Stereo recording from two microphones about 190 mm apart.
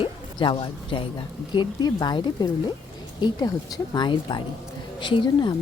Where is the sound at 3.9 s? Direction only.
25° left (ahead or behind).